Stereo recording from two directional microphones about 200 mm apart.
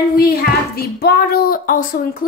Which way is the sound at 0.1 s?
50° left (ahead or behind).